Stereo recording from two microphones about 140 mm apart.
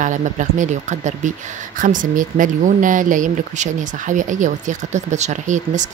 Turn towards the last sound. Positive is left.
turn(degrees=-60)  # may be behind; listen again after turning